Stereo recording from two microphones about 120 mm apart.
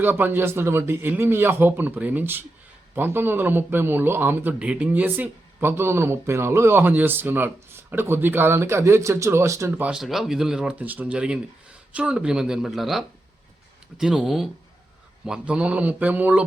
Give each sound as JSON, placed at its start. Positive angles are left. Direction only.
{"t": 0.0, "sound": "a man's voice", "side_deg": -15}
{"t": 9.8, "sound": "a man's voice", "side_deg": -5}